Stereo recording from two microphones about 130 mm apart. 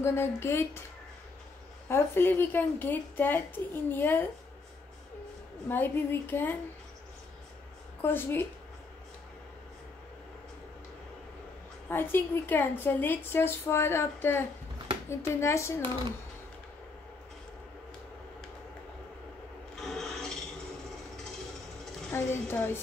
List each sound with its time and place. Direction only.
0.0 s speech: 20° left (ahead or behind)
1.9 s a woman's voice: 20° left (ahead or behind)
5.7 s a woman's voice: 15° left (ahead or behind)
8.0 s a woman's voice: 15° left (ahead or behind)
11.9 s a woman's voice: 15° left (ahead or behind)
19.7 s rub: 5° left (ahead or behind)
22.1 s a woman's voice: 15° left (ahead or behind)